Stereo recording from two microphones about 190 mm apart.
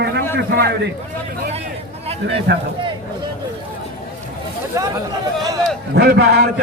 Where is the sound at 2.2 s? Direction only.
65° right (ahead or behind).